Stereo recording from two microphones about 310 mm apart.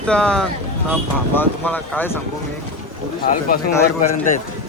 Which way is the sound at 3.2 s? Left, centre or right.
Left.